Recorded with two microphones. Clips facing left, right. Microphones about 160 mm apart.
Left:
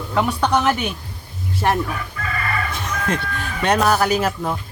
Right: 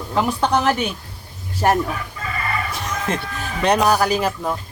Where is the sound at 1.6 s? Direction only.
35° right (ahead or behind).